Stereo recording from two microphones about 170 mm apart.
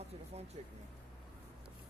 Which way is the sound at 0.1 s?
40° right (ahead or behind).